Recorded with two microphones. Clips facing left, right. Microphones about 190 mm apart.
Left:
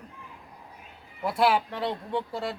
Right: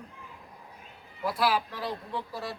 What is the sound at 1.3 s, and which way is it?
Speech, 25° left (ahead or behind).